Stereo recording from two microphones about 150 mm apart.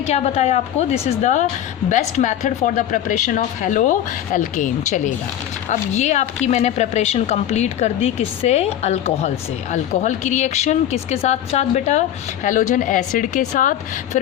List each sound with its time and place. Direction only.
0.0 s speech: 45° left (ahead or behind)